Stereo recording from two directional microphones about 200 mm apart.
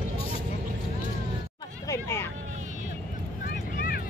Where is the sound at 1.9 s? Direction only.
15° left (ahead or behind).